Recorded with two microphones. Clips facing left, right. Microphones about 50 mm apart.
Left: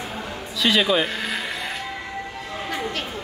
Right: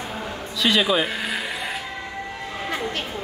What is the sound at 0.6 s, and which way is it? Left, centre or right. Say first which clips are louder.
Speech: even; centre.